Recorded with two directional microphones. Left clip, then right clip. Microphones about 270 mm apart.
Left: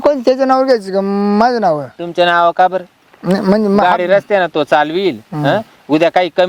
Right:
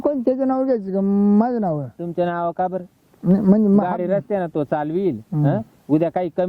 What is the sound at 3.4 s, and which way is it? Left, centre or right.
Speech, centre.